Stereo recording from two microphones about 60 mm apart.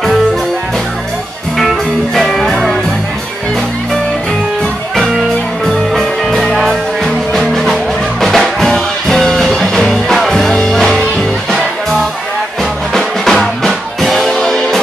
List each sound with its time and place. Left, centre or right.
2.1 s music: centre
5.7 s music: centre